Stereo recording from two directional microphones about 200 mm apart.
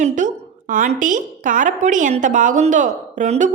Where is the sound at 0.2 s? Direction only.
35° right (ahead or behind).